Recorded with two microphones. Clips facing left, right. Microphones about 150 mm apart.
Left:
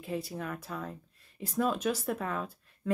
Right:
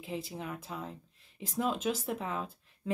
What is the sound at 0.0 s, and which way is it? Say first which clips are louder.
Speech: left 3 dB; 20° right (ahead or behind).